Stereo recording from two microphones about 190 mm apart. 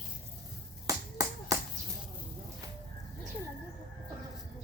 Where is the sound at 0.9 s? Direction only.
15° right (ahead or behind).